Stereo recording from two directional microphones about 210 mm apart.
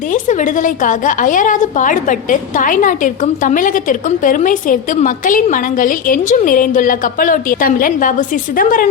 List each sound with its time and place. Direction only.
0.1 s a woman's voice: 35° left (ahead or behind)